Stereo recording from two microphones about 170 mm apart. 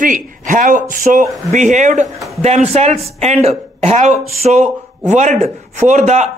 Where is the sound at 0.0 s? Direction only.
50° right (ahead or behind).